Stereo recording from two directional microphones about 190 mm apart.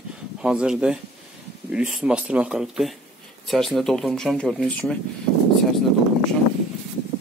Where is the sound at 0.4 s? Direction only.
5° right (ahead or behind).